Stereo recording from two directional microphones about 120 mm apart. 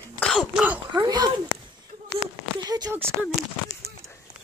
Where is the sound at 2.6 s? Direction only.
35° right (ahead or behind).